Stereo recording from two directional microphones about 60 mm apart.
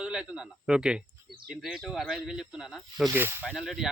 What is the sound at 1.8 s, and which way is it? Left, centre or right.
A man's voice, centre.